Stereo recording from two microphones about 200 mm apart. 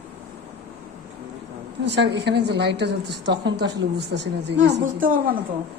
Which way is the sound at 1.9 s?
60° right (ahead or behind).